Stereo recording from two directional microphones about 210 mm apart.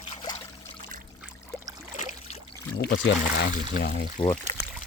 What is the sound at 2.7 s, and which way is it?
Speech, 55° left (ahead or behind).